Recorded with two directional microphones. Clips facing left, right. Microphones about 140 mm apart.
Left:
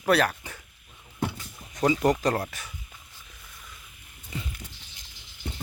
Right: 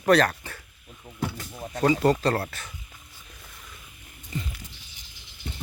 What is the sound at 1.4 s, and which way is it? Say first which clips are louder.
Vehicle: right 10 dB; 65° right (ahead or behind).